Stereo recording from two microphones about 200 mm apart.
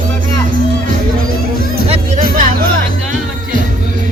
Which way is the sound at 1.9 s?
40° right (ahead or behind).